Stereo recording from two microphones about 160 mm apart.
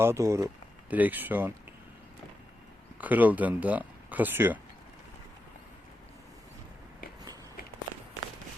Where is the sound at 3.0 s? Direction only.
10° right (ahead or behind).